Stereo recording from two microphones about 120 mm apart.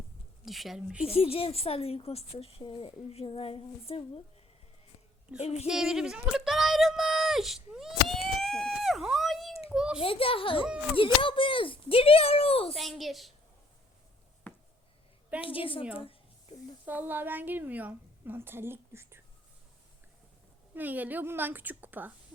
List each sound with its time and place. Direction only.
0.4 s speech: centre (ahead or behind)
1.0 s speech: 55° left (ahead or behind)
5.4 s speech: 60° left (ahead or behind)
5.6 s a sound: 5° right (ahead or behind)
10.0 s speech: 50° left (ahead or behind)
12.7 s speech: centre (ahead or behind)
14.5 s a sound: 15° left (ahead or behind)
15.4 s speech: 50° left (ahead or behind)
15.8 s a woman's voice: 10° right (ahead or behind)
20.7 s a woman's voice: 15° right (ahead or behind)